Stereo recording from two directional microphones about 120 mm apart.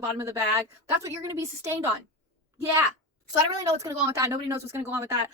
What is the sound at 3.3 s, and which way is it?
A woman's voice, 30° right (ahead or behind).